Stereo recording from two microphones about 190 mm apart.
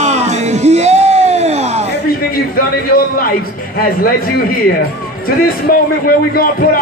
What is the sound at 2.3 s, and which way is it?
Speech, 50° left (ahead or behind).